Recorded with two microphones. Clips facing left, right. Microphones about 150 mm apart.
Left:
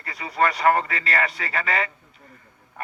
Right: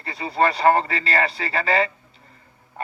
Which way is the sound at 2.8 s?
30° right (ahead or behind).